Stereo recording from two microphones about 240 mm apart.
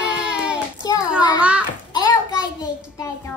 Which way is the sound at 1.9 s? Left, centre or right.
Centre.